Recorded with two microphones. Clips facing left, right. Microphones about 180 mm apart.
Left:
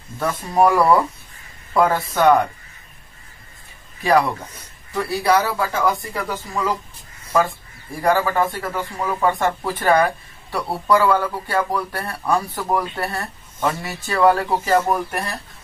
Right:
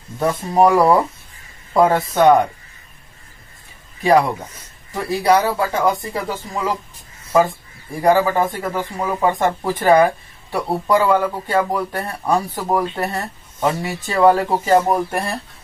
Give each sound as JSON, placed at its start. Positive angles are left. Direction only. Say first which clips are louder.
{"t": 0.2, "sound": "a man's voice", "louder": "right 2 dB", "side_deg": -25}
{"t": 4.0, "sound": "a man's voice", "louder": "right 3 dB", "side_deg": -20}